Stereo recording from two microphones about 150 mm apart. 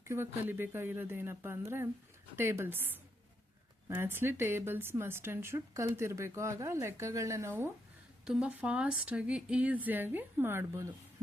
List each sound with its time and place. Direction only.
0.0 s a woman's voice: 15° right (ahead or behind)
8.2 s a woman's voice: 5° right (ahead or behind)